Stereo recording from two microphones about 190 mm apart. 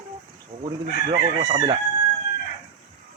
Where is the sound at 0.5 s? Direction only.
25° right (ahead or behind).